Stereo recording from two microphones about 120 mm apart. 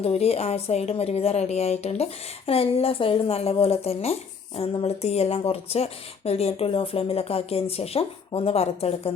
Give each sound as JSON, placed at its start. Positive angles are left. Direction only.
{"t": 0.0, "sound": "speech", "side_deg": 60}